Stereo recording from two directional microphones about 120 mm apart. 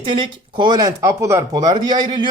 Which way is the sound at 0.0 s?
45° right (ahead or behind).